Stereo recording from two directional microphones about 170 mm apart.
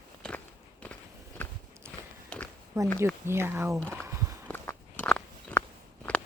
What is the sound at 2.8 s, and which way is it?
Speech, 20° right (ahead or behind).